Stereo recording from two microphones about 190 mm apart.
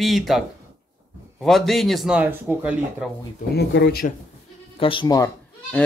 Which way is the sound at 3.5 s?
60° left (ahead or behind).